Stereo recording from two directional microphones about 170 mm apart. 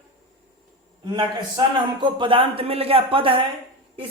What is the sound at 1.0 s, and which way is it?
A man's voice, 25° right (ahead or behind).